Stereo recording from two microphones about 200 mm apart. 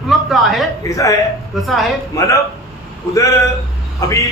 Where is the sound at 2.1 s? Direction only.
15° left (ahead or behind).